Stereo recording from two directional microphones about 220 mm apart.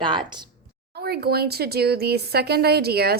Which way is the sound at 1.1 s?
45° right (ahead or behind).